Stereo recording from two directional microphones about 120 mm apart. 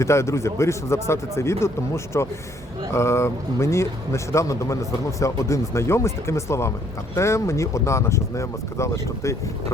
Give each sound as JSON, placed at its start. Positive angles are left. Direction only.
{"t": 0.0, "sound": "speech", "side_deg": 25}